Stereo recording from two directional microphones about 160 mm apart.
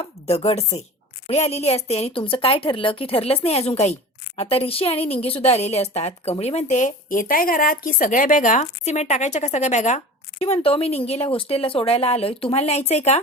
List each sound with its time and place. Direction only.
0.0 s a woman's voice: 40° left (ahead or behind)
10.4 s speech: 35° left (ahead or behind)